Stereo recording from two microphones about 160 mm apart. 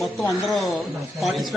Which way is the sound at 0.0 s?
Centre (ahead or behind).